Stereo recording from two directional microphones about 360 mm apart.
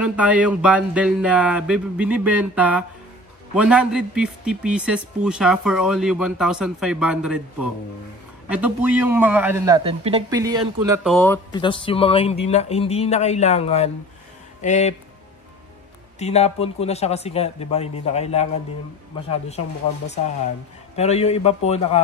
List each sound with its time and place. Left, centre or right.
0.0 s a man's voice: centre
8.5 s a man's voice: centre
16.2 s speech: centre
20.9 s speech: centre